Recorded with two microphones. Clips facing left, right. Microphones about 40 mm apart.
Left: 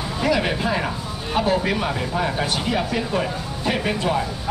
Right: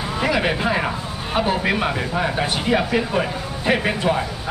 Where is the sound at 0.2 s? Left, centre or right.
Centre.